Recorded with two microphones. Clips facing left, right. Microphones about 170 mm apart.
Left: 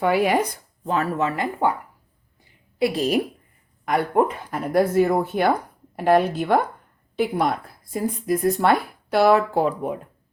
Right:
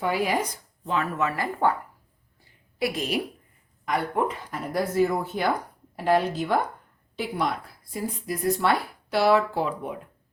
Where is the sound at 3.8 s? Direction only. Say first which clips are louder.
Left 6 dB; 55° left (ahead or behind).